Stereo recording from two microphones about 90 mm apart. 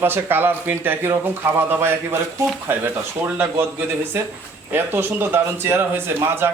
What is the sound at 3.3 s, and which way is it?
Speech, 25° right (ahead or behind).